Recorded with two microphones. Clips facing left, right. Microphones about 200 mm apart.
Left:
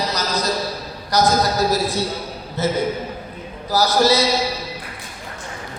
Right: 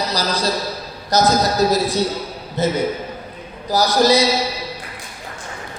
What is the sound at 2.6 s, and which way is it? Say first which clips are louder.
A man's voice: right 1 dB; 15° right (ahead or behind).